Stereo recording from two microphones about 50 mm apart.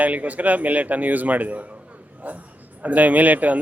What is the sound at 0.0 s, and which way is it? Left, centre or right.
A man's voice, right.